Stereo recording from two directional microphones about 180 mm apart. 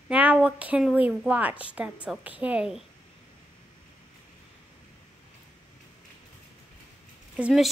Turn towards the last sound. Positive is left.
turn(degrees=-5)  # may be behind; listen again after turning